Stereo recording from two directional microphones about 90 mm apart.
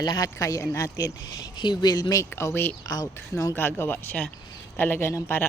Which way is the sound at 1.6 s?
50° left (ahead or behind).